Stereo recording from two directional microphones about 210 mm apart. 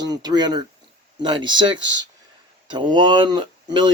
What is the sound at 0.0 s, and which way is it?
Speech, 20° right (ahead or behind).